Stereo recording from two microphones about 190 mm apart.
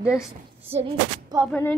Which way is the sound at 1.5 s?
10° left (ahead or behind).